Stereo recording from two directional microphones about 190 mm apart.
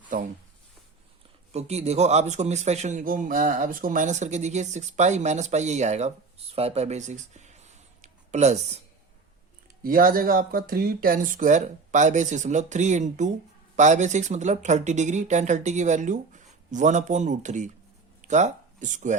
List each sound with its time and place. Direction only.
0.1 s a sound: 45° right (ahead or behind)
1.5 s a man's voice: 35° right (ahead or behind)
9.8 s a man's voice: 50° right (ahead or behind)